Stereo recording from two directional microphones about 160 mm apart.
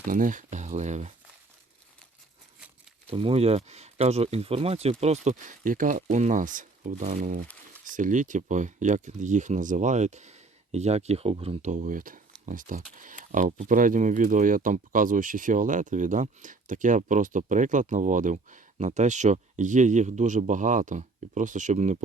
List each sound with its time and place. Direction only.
0.1 s speech: 55° right (ahead or behind)
3.1 s speech: 40° right (ahead or behind)